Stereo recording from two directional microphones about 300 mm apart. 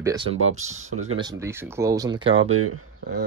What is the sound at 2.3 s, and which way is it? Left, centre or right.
Speech, right.